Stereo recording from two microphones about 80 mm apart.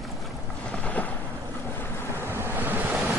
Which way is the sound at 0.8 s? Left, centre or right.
Centre.